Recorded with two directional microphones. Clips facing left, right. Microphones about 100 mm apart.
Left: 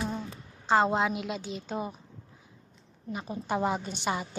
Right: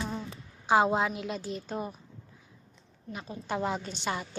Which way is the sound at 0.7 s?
5° right (ahead or behind).